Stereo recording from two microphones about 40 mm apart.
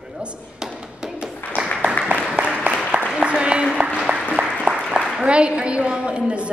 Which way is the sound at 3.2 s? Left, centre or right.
Right.